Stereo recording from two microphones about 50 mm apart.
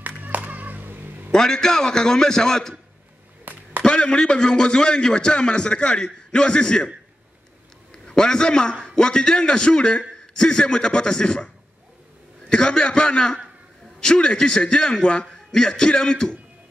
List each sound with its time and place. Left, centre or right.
0.0 s clapping: right
1.3 s a man's voice: centre
3.5 s a sound: right
3.8 s a man's voice: centre
7.9 s a man's voice: centre